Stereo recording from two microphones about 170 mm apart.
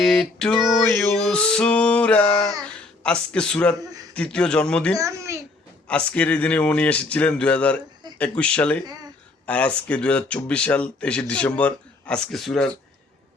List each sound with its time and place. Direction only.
0.0 s female singing: centre (ahead or behind)
4.9 s a child's voice: 20° right (ahead or behind)
6.1 s speech: 10° left (ahead or behind)